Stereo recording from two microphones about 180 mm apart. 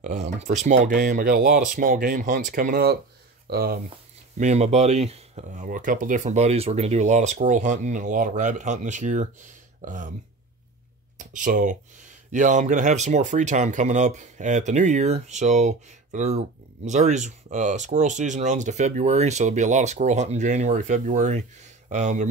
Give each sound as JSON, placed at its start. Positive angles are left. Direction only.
{"t": 0.0, "sound": "speech", "side_deg": -40}
{"t": 3.9, "sound": "speech", "side_deg": -40}
{"t": 11.1, "sound": "speech", "side_deg": -45}